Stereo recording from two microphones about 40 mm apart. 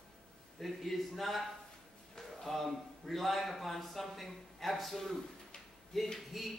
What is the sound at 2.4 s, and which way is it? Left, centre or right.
A man's voice, centre.